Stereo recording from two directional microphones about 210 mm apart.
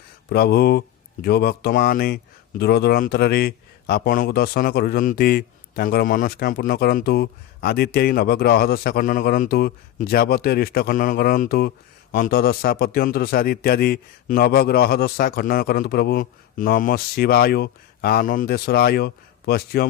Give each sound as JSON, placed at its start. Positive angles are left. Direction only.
{"t": 0.3, "sound": "speech", "side_deg": 50}